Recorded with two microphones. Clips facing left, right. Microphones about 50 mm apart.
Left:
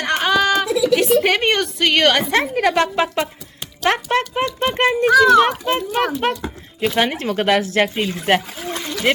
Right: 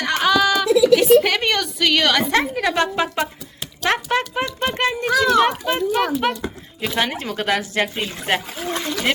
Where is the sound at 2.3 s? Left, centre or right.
Left.